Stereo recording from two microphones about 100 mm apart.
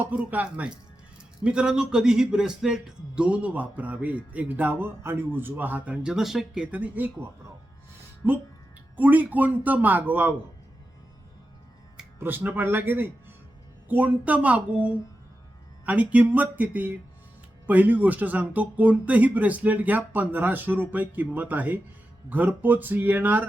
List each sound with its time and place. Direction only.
0.0 s a man's voice: 15° right (ahead or behind)
12.2 s a man's voice: 20° right (ahead or behind)